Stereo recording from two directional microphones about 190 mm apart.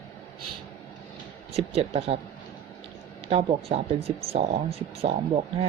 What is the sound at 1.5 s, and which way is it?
Speech, 30° right (ahead or behind).